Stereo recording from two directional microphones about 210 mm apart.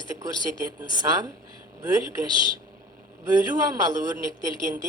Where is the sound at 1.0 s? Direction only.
20° right (ahead or behind).